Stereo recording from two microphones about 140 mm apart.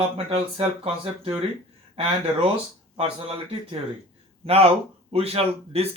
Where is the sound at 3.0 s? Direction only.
40° right (ahead or behind).